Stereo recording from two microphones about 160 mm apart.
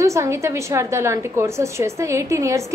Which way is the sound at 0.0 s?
20° right (ahead or behind).